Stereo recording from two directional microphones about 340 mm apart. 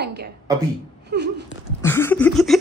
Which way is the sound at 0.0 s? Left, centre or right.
Right.